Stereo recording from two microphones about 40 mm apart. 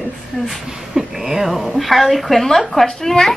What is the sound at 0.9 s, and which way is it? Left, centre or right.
Speech, centre.